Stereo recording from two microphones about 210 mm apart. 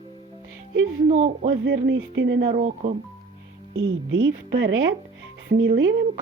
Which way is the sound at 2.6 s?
35° right (ahead or behind).